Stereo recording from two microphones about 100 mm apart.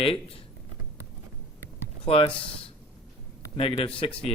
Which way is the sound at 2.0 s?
70° left (ahead or behind).